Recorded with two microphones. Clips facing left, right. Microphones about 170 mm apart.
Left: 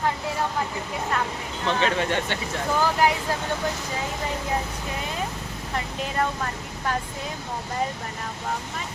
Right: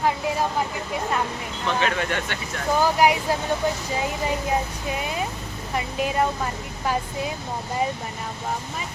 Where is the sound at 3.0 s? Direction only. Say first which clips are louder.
Right 3 dB; 15° right (ahead or behind).